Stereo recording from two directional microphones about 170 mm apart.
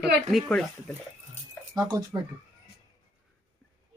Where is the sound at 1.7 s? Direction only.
20° right (ahead or behind).